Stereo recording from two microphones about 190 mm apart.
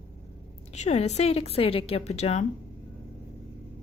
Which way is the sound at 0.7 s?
35° left (ahead or behind).